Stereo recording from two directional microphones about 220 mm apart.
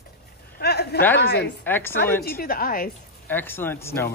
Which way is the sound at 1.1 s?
50° left (ahead or behind).